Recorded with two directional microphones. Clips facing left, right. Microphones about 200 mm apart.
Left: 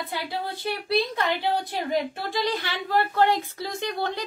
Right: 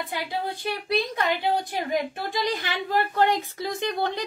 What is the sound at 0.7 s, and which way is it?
A woman's voice, 15° right (ahead or behind).